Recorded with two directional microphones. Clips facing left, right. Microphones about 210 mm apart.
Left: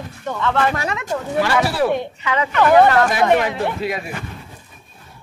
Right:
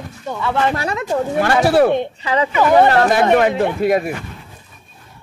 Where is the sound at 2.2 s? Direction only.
35° right (ahead or behind).